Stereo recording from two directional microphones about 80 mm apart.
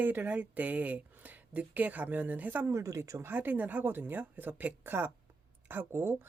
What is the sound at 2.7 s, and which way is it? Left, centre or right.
Speech, right.